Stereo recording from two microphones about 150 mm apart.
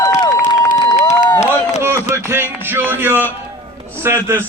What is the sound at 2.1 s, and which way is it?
A man's voice, 15° right (ahead or behind).